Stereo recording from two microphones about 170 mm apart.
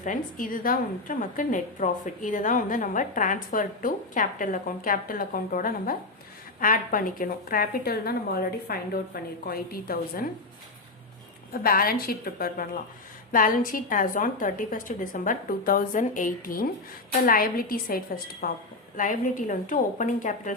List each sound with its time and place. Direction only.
0.0 s a woman's voice: 50° left (ahead or behind)
11.5 s a woman's voice: 60° left (ahead or behind)